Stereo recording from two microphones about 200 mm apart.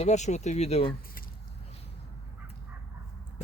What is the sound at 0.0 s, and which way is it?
Speech, 35° left (ahead or behind).